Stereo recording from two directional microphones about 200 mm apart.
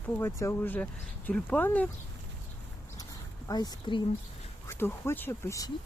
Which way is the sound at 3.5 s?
20° left (ahead or behind).